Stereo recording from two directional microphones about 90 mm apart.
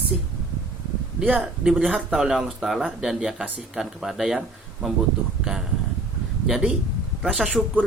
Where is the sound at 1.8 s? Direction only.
5° left (ahead or behind).